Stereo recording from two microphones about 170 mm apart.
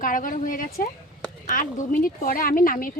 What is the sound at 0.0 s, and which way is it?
Speech, 55° left (ahead or behind).